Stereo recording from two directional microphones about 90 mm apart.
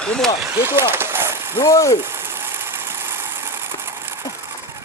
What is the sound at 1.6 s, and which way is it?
Speech, 40° left (ahead or behind).